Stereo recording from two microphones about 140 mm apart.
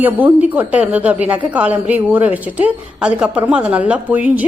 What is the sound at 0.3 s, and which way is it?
A woman's voice, 10° right (ahead or behind).